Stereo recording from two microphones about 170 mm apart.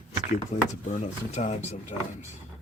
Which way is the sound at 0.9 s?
45° left (ahead or behind).